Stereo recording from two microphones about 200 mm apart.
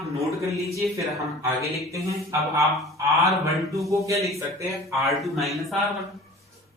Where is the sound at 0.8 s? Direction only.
15° right (ahead or behind).